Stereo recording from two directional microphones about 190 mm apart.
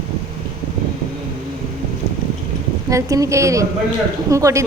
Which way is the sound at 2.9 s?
15° right (ahead or behind).